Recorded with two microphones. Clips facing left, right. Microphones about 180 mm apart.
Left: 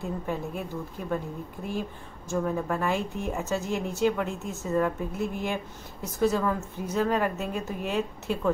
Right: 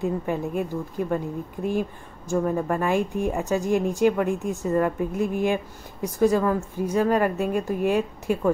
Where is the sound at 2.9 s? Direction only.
55° right (ahead or behind).